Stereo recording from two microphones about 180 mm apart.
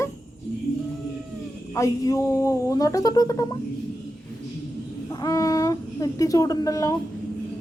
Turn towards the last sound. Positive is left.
turn(degrees=20)  # may be behind; listen again after turning